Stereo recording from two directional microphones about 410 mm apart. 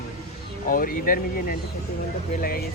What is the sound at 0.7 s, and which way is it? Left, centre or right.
Speech, centre.